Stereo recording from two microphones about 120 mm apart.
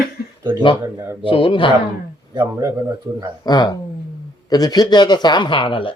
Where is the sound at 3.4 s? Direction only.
35° left (ahead or behind).